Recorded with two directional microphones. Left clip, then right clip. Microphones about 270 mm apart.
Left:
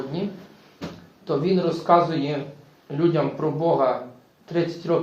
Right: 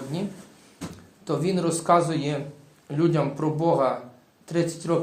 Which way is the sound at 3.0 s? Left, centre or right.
Right.